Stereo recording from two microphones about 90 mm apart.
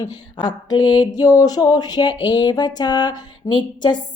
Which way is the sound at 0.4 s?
55° left (ahead or behind).